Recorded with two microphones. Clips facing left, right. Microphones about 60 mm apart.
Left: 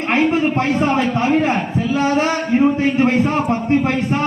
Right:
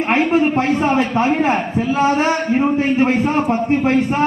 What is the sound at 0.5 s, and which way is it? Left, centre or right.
A man's voice, centre.